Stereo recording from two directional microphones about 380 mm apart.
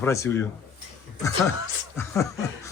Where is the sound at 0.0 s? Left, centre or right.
Centre.